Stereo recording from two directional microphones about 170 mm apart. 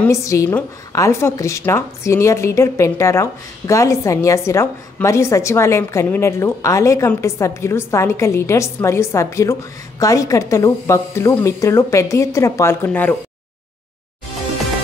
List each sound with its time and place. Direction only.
0.0 s a woman's voice: 15° left (ahead or behind)